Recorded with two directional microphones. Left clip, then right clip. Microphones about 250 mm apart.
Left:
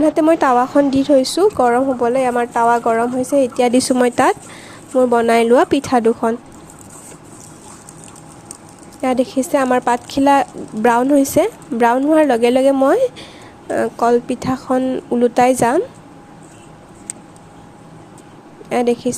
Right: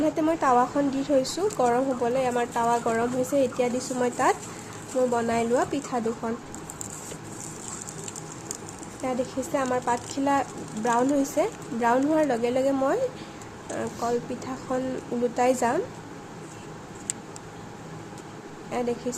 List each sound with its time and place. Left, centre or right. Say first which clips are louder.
0.0 s a woman's voice: left 11 dB; left
9.0 s a woman's voice: left 12 dB; left
18.7 s a woman's voice: left 12 dB; left